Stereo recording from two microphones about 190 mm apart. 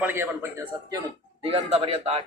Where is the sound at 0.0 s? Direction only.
10° right (ahead or behind).